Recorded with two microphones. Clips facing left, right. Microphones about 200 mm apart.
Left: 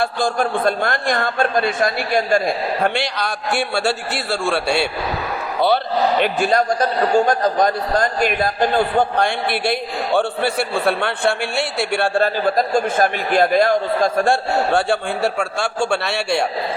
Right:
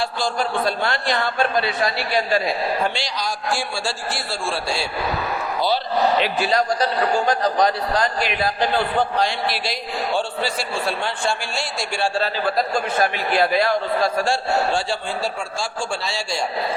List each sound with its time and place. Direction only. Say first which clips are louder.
0.0 s a man's voice: left 4 dB; 50° left (ahead or behind)